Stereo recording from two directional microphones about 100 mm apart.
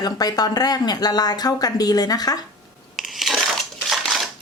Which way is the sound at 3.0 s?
Centre (ahead or behind).